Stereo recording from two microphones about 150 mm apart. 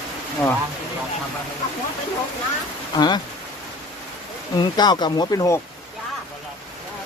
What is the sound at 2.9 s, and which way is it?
Speech, 30° left (ahead or behind).